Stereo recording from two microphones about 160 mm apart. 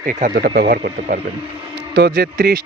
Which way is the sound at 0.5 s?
80° right.